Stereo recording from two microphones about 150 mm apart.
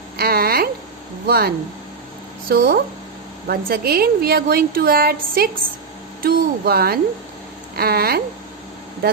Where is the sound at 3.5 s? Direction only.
90° right.